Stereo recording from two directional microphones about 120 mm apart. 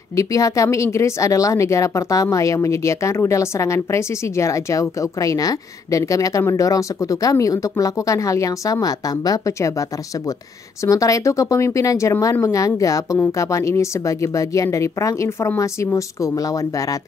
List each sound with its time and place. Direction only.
0.1 s a woman's voice: 25° left (ahead or behind)